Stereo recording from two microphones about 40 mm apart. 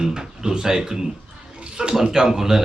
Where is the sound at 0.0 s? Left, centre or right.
Centre.